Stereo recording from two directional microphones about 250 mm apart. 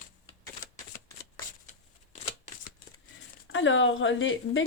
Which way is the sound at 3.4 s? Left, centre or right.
Left.